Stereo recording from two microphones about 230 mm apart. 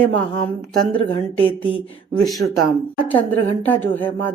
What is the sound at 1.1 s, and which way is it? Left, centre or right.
Speech, left.